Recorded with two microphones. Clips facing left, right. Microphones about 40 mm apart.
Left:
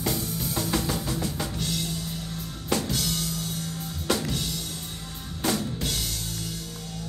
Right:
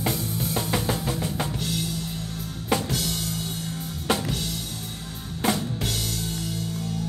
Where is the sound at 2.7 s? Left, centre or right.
Centre.